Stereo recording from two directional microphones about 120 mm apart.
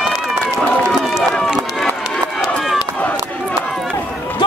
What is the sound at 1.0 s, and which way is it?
Run, centre (ahead or behind).